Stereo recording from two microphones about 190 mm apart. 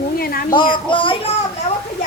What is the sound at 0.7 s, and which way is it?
Speech, 25° left (ahead or behind).